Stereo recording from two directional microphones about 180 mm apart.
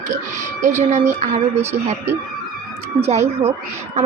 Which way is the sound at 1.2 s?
35° right (ahead or behind).